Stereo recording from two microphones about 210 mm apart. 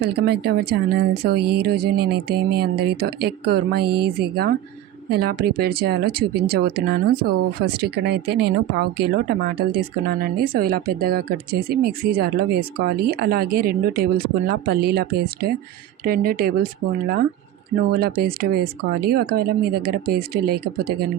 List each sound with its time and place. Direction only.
0.0 s speech: 50° right (ahead or behind)
17.9 s speech: 45° right (ahead or behind)